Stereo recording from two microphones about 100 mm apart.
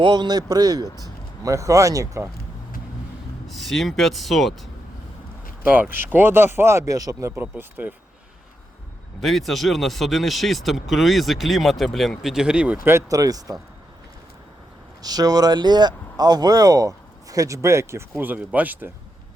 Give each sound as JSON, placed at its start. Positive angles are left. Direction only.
{"t": 0.0, "sound": "speech", "side_deg": -45}
{"t": 3.4, "sound": "speech", "side_deg": 0}
{"t": 5.6, "sound": "speech", "side_deg": -15}
{"t": 7.4, "sound": "speech", "side_deg": -15}
{"t": 9.2, "sound": "speech", "side_deg": 0}
{"t": 12.8, "sound": "speech", "side_deg": -25}
{"t": 15.0, "sound": "speech", "side_deg": -40}
{"t": 18.2, "sound": "speech", "side_deg": -15}